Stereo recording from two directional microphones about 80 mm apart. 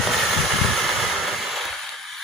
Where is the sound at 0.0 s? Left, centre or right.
Centre.